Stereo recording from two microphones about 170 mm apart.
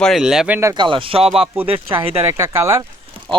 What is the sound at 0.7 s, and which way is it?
Speech, 30° right (ahead or behind).